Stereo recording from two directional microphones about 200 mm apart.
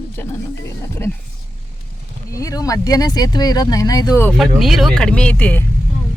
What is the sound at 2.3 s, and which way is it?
Speech, 15° left (ahead or behind).